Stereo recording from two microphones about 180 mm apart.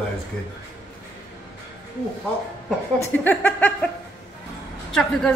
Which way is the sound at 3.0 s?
10° left (ahead or behind).